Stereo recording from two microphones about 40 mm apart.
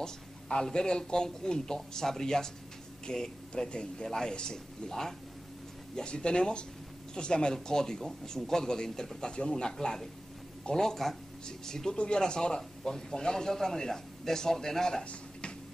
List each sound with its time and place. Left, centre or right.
0.0 s a man's voice: centre
5.9 s a man's voice: left
9.3 s a man's voice: left